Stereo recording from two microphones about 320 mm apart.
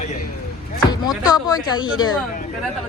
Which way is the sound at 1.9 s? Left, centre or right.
Left.